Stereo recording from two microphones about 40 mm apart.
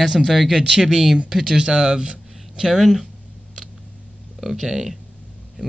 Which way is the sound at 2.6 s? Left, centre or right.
Centre.